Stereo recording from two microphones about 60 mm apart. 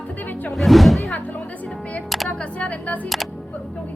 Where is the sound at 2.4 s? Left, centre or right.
Left.